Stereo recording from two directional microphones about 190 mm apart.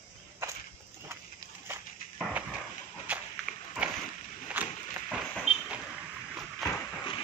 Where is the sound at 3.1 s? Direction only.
5° right (ahead or behind).